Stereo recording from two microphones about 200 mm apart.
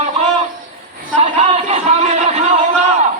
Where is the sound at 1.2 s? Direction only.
35° right (ahead or behind).